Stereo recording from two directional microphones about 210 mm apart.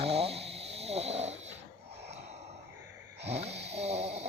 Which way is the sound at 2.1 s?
30° right (ahead or behind).